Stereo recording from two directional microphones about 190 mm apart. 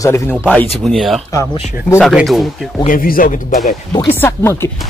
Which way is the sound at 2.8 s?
45° left (ahead or behind).